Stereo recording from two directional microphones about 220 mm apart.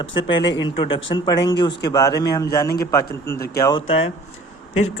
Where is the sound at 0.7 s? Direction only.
20° left (ahead or behind).